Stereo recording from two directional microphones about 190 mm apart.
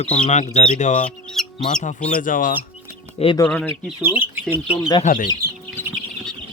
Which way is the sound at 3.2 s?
30° left (ahead or behind).